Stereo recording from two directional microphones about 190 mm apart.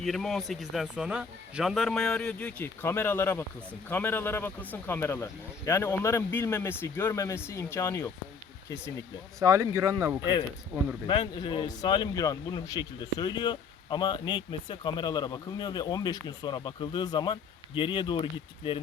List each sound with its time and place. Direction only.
0.0 s speech: centre (ahead or behind)
9.4 s speech: 15° right (ahead or behind)
11.0 s speech: 25° left (ahead or behind)